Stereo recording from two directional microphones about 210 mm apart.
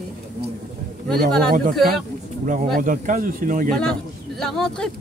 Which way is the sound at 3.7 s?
5° left (ahead or behind).